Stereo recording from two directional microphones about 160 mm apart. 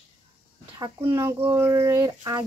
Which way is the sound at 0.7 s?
25° right (ahead or behind).